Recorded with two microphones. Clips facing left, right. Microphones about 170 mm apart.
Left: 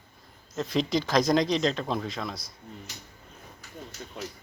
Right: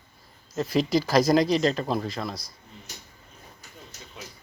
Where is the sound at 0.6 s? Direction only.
5° right (ahead or behind).